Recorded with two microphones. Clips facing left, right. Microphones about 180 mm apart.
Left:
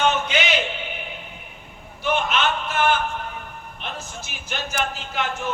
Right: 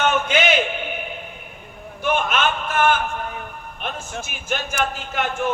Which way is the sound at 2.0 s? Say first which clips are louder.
Right 1 dB; 50° right (ahead or behind).